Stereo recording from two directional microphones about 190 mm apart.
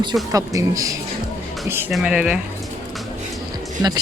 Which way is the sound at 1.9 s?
5° right (ahead or behind).